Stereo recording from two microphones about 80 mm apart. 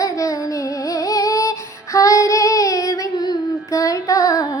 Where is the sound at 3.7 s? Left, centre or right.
Left.